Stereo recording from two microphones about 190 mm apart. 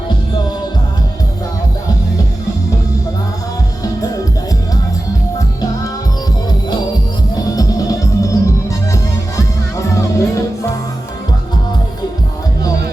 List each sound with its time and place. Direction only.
7.5 s music: 20° left (ahead or behind)
9.7 s music: 15° left (ahead or behind)